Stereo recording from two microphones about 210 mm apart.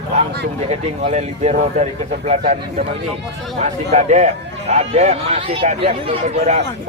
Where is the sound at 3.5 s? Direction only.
35° right (ahead or behind).